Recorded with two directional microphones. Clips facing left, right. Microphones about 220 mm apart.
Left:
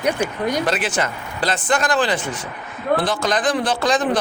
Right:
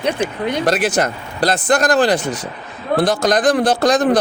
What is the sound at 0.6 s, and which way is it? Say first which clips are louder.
A man's voice: right 5 dB; 40° right (ahead or behind).